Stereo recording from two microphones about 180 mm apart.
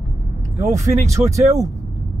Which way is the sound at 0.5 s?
15° right (ahead or behind).